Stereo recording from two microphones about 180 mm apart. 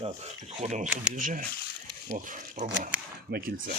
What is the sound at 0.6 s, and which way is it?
Speech, 40° right (ahead or behind).